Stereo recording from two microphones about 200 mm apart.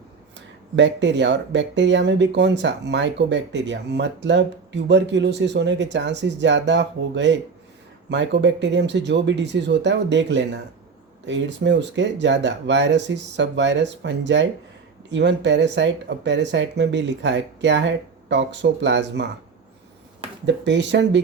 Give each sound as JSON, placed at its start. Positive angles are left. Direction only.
{"t": 0.3, "sound": "speech", "side_deg": -65}
{"t": 20.4, "sound": "speech", "side_deg": -60}